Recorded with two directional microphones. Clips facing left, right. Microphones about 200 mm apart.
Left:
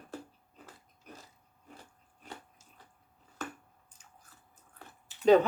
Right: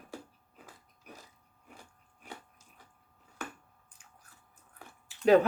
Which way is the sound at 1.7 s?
10° right (ahead or behind).